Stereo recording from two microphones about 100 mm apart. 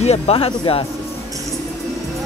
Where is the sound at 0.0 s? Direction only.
80° left; by 0.8 s 65° left (ahead or behind).